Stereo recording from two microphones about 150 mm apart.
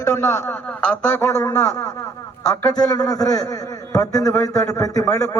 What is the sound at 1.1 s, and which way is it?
A man's voice, 20° left (ahead or behind).